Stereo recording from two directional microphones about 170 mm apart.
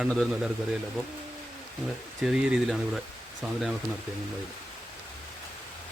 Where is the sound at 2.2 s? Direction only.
5° right (ahead or behind).